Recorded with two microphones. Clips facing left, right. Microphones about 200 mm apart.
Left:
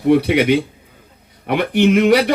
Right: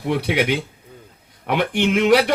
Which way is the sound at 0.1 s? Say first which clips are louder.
Left 7 dB; 55° left (ahead or behind).